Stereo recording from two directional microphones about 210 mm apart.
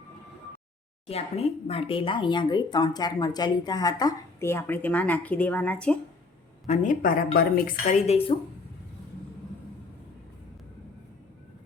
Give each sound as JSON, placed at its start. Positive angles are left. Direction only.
{"t": 1.0, "sound": "speech", "side_deg": 30}
{"t": 6.7, "sound": "speech", "side_deg": 40}